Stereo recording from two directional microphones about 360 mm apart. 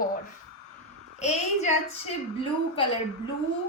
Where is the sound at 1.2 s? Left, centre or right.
Centre.